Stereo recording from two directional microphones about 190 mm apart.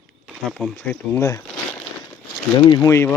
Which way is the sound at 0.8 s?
10° left (ahead or behind).